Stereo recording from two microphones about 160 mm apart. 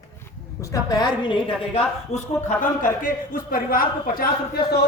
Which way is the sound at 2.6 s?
60° left (ahead or behind).